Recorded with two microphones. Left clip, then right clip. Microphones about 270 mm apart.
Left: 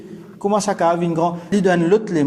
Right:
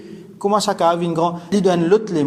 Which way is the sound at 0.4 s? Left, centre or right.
Centre.